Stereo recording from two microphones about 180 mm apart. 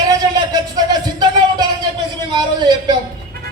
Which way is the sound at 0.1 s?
20° right (ahead or behind).